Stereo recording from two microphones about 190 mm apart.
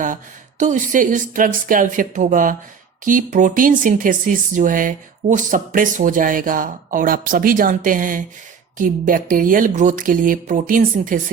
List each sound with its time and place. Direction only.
0.6 s speech: 40° right (ahead or behind)